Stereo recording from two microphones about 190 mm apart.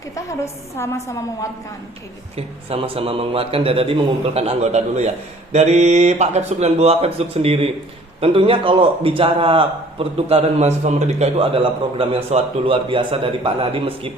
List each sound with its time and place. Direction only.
0.4 s a woman's voice: 15° left (ahead or behind)
2.3 s a man's voice: 30° right (ahead or behind)